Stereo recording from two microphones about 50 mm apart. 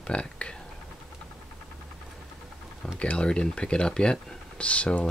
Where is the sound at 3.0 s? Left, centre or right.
Left.